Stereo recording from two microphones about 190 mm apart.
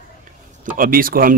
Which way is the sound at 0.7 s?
50° right (ahead or behind).